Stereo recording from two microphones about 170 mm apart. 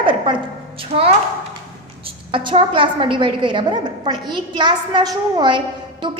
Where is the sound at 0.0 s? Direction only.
30° right (ahead or behind).